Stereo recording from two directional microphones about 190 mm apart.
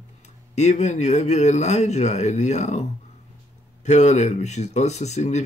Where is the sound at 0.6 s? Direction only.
35° left (ahead or behind).